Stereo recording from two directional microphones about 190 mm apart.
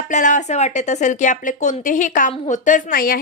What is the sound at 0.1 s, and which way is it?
Speech, 40° left (ahead or behind).